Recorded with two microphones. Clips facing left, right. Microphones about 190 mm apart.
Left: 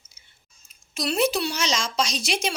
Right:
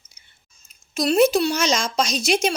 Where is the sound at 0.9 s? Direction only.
45° right (ahead or behind).